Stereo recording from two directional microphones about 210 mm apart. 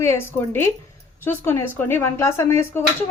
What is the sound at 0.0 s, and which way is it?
A woman's voice, 10° left (ahead or behind).